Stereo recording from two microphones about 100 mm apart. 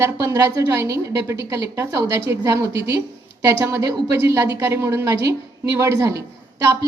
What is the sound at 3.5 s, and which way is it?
Speech, 25° right (ahead or behind).